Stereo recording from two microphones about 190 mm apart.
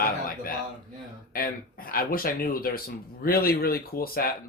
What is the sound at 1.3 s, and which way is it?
Speech, 50° left (ahead or behind).